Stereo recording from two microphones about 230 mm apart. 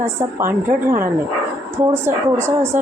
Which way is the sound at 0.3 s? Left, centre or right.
Centre.